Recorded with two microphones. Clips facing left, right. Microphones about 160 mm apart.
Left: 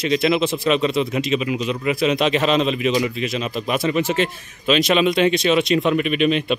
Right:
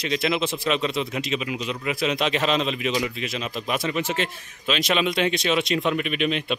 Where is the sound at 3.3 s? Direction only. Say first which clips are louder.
Left 5 dB; 40° left (ahead or behind).